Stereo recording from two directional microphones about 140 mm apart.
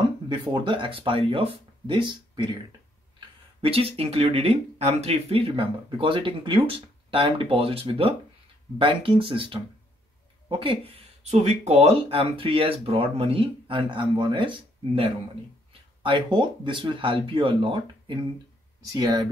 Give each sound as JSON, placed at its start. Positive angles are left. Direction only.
{"t": 0.3, "sound": "speech", "side_deg": -35}
{"t": 3.6, "sound": "speech", "side_deg": -40}
{"t": 10.6, "sound": "speech", "side_deg": -40}
{"t": 16.0, "sound": "speech", "side_deg": -35}